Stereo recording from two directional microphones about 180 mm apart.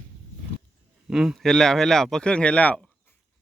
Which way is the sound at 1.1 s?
Centre (ahead or behind).